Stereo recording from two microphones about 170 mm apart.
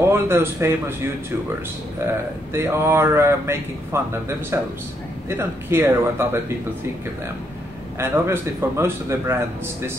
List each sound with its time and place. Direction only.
0.0 s a man's voice: 15° right (ahead or behind)
2.5 s a man's voice: 15° right (ahead or behind)
5.3 s a man's voice: 15° right (ahead or behind)
8.0 s a man's voice: 15° right (ahead or behind)